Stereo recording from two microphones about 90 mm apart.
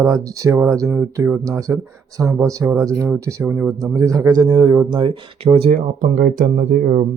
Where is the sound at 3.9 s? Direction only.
40° right (ahead or behind).